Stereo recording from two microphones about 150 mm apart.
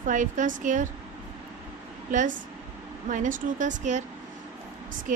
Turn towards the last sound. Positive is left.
turn(degrees=-60)  # may be behind; listen again after turning